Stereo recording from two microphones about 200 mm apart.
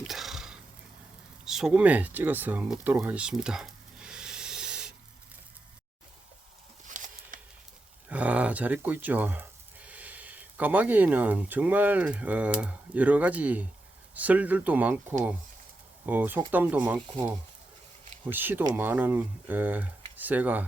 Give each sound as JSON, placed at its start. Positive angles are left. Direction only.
{"t": 0.1, "sound": "a sound", "side_deg": 0}
{"t": 1.5, "sound": "speech", "side_deg": -5}
{"t": 6.8, "sound": "a sound", "side_deg": -40}
{"t": 8.1, "sound": "speech", "side_deg": -5}
{"t": 16.0, "sound": "speech", "side_deg": -10}
{"t": 18.3, "sound": "speech", "side_deg": -10}